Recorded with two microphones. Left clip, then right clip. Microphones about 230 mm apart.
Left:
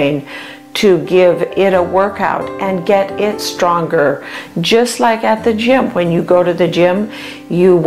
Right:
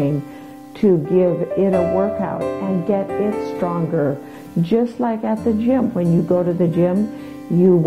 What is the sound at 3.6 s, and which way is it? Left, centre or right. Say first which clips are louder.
Speech: left 10 dB; centre.